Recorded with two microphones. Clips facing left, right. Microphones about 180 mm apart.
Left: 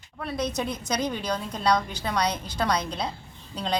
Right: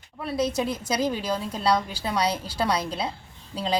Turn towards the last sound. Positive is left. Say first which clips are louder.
# right 2 dB
turn(degrees=-5)  # may be behind; listen again after turning